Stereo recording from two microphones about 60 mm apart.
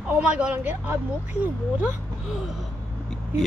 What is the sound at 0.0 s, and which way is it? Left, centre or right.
Speech, centre.